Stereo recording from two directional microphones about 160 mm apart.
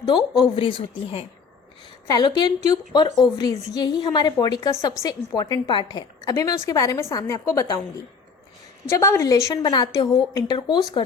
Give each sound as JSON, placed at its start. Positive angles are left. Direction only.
{"t": 0.3, "sound": "a woman's voice", "side_deg": 35}
{"t": 8.9, "sound": "a woman's voice", "side_deg": 20}